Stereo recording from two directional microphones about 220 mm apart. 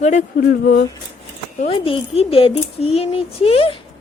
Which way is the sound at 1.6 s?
25° left (ahead or behind).